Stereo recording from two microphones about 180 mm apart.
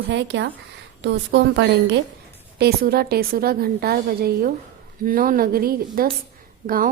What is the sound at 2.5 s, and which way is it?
A woman's voice, 60° right (ahead or behind).